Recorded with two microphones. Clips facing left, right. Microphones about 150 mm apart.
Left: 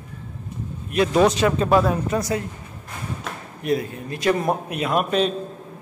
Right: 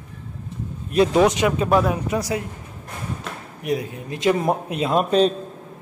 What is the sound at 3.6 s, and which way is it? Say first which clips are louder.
A man's voice: left 2 dB; 15° right (ahead or behind).